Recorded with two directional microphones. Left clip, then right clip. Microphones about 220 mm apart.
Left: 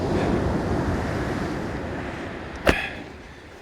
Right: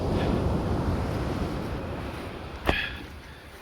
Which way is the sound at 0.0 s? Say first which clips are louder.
Left 4 dB; 45° right (ahead or behind).